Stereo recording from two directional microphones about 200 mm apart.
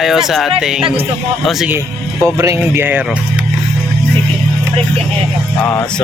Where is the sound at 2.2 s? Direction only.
15° right (ahead or behind).